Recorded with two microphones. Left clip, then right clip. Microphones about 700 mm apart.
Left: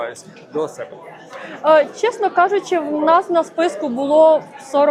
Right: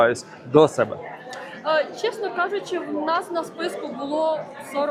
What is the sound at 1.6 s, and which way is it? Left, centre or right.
A woman's voice, left.